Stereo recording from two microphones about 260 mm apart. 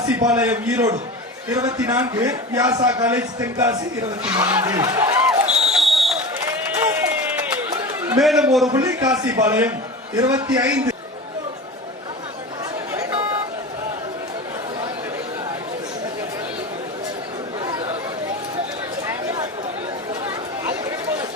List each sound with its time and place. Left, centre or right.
0.0 s a sound: centre
0.3 s a man's voice: centre
5.5 s a sound: centre
7.7 s chatter: centre
8.2 s a man's voice: centre
8.7 s a man's voice: centre
17.6 s chatter: centre
20.7 s chatter: centre